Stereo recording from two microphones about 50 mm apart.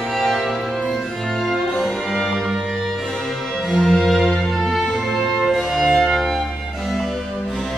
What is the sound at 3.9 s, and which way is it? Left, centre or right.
Music, centre.